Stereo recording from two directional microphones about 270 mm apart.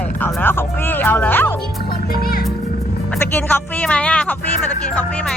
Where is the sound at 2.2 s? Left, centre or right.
Left.